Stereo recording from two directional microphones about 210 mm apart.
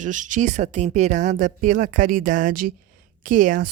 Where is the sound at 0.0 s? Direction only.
35° right (ahead or behind).